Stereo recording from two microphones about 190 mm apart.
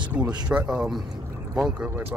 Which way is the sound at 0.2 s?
5° right (ahead or behind).